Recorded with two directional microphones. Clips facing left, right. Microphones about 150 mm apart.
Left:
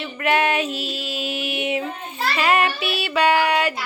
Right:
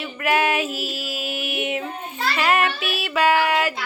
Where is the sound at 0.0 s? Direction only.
5° right (ahead or behind).